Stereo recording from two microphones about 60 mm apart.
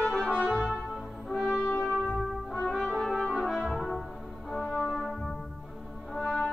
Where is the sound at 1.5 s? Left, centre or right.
Left.